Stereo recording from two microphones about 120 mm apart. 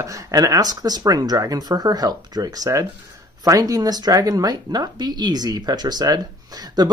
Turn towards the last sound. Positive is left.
turn(degrees=-35)  # may be behind; listen again after turning